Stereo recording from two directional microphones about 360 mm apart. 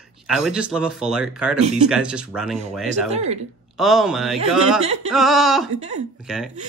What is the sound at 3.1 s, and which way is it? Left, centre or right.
Speech, centre.